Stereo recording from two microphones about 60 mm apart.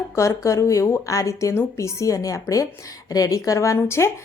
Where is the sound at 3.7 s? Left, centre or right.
Left.